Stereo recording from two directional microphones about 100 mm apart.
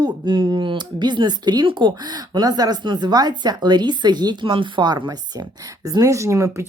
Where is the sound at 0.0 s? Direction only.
50° right (ahead or behind).